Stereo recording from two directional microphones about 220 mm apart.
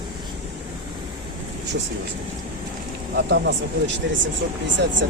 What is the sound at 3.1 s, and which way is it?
Speech, 50° right (ahead or behind).